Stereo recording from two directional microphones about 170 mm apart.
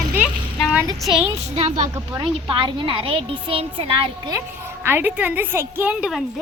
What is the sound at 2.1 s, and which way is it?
A child's voice, 30° right (ahead or behind).